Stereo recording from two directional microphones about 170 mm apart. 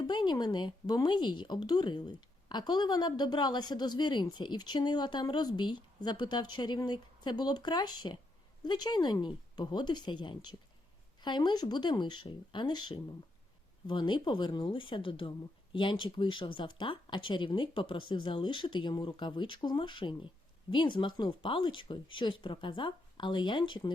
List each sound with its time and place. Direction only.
0.1 s speech: 25° left (ahead or behind)